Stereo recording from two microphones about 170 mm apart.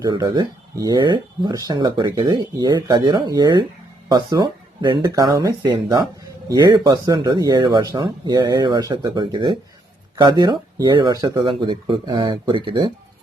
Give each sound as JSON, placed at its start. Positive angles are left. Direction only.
{"t": 0.0, "sound": "speech", "side_deg": -25}